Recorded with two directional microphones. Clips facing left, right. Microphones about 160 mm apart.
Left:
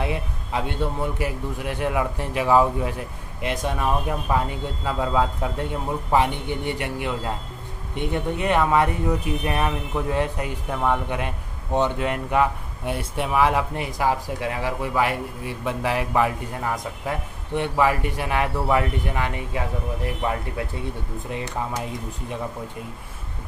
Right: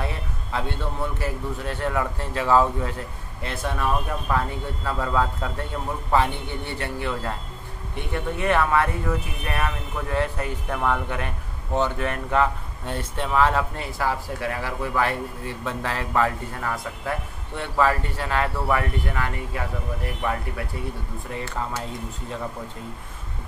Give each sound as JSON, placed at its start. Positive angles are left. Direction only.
{"t": 0.0, "sound": "speech", "side_deg": 15}
{"t": 21.3, "sound": "speech", "side_deg": 20}